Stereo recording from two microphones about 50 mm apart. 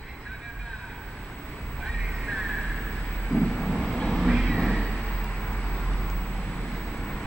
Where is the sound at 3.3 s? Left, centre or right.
Centre.